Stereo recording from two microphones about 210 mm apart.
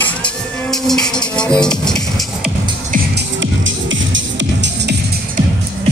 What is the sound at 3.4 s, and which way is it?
Music, 60° right (ahead or behind).